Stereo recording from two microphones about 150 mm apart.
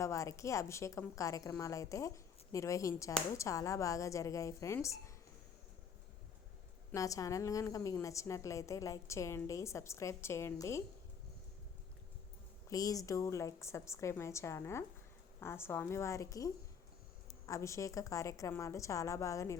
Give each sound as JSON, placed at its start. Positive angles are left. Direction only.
{"t": 0.0, "sound": "a woman's voice", "side_deg": 20}
{"t": 6.9, "sound": "a woman's voice", "side_deg": 20}
{"t": 12.6, "sound": "a woman's voice", "side_deg": 25}